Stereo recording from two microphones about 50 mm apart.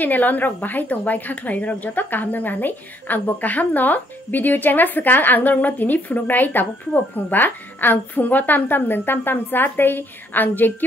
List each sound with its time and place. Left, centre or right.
0.0 s a woman's voice: left